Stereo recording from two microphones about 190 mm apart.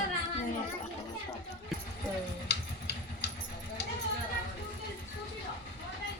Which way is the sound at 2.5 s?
65° left (ahead or behind).